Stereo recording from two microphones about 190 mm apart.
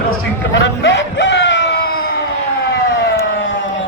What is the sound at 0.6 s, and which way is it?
Music, 65° left (ahead or behind).